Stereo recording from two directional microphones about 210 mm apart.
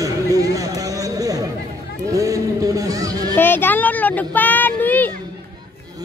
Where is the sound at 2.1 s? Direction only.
15° right (ahead or behind).